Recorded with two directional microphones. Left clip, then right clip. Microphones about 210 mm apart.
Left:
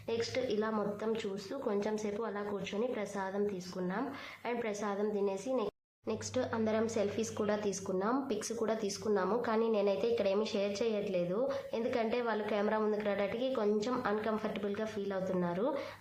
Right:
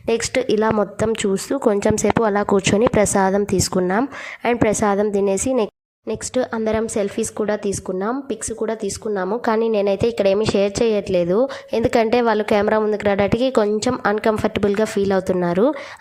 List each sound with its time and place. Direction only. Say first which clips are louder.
0.0 s a woman's voice: right 15 dB; 45° right (ahead or behind)